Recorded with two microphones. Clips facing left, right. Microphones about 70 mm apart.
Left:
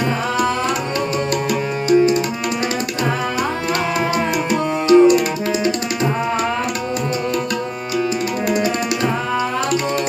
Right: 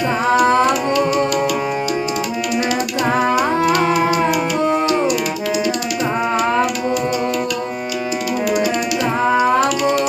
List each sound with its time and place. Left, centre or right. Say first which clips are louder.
4.9 s music: left 7 dB; left